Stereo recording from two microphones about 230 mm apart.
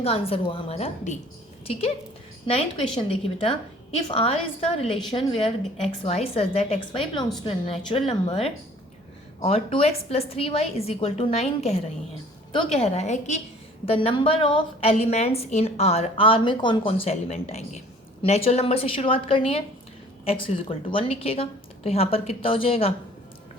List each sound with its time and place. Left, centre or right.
0.0 s a woman's voice: left
2.5 s a woman's voice: left